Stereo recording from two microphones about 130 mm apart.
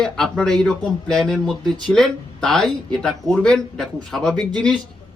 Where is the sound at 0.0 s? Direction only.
5° left (ahead or behind).